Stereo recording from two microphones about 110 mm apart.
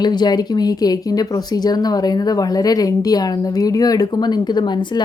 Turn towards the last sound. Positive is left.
turn(degrees=45)  # may be behind; listen again after turning